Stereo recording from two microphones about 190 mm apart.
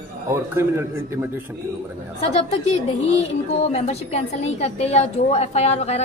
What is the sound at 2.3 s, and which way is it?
A woman's voice, 35° left (ahead or behind).